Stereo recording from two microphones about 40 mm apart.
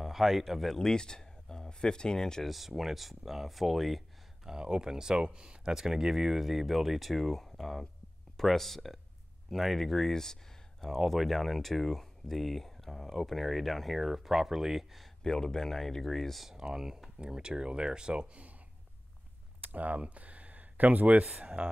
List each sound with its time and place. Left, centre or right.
0.0 s speech: centre
0.7 s speech: centre
2.4 s speech: centre
4.5 s speech: centre
15.2 s speech: centre
16.4 s speech: centre
17.2 s speech: right
19.6 s speech: right